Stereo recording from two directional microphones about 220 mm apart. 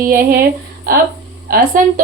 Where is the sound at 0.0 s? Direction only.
40° right (ahead or behind).